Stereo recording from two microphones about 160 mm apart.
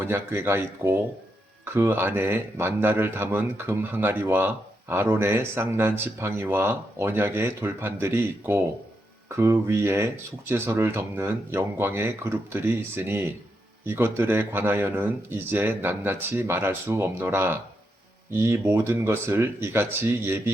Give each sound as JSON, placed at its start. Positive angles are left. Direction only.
{"t": 0.0, "sound": "a man's voice", "side_deg": -15}